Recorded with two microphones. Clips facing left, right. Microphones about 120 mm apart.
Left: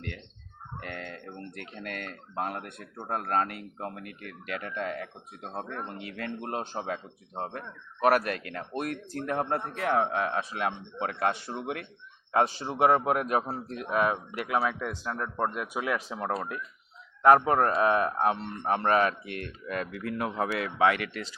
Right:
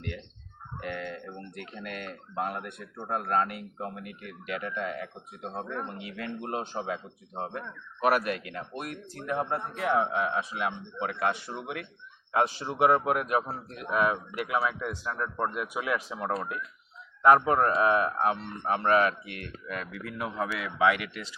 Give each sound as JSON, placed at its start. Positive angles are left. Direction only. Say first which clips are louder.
{"t": 0.8, "sound": "a man's voice", "louder": "right 4 dB", "side_deg": 45}